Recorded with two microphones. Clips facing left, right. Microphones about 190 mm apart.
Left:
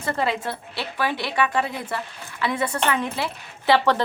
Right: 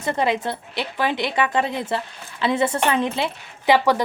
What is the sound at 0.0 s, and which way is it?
A woman's voice, 20° right (ahead or behind).